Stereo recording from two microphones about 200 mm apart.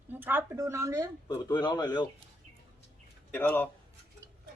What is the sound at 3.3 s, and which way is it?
Speech, 10° left (ahead or behind).